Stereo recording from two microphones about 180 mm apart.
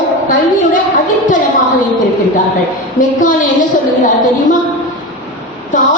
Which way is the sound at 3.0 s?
45° left (ahead or behind).